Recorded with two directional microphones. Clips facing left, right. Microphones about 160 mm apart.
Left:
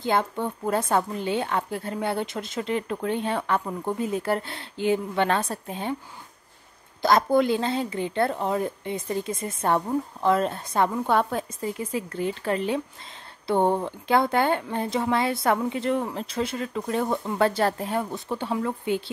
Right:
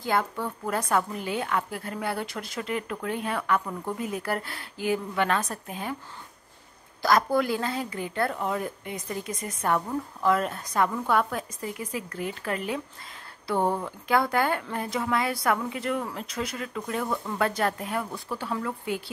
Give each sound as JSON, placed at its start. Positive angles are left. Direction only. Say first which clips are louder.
{"t": 0.0, "sound": "a woman's voice", "louder": "left 3 dB", "side_deg": 25}
{"t": 7.0, "sound": "a woman's voice", "louder": "left 3 dB", "side_deg": 25}